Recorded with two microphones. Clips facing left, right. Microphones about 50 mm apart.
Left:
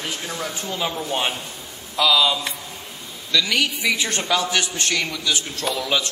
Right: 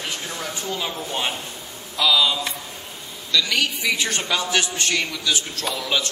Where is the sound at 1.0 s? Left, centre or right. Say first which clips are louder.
Left 2 dB; left.